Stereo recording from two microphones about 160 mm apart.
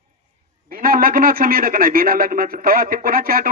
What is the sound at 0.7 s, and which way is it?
A man's voice, 65° right (ahead or behind).